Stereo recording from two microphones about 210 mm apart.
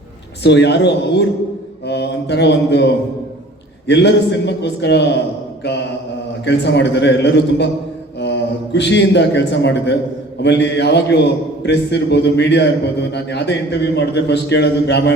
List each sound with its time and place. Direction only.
0.4 s a man's voice: 55° left (ahead or behind)
6.4 s a man's voice: 55° left (ahead or behind)